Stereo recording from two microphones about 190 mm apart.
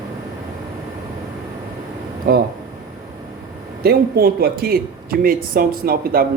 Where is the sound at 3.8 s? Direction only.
55° right (ahead or behind).